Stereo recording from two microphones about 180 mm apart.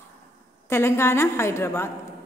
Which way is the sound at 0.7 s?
15° left (ahead or behind).